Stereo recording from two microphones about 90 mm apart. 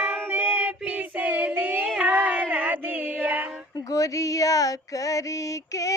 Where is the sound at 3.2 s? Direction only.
20° right (ahead or behind).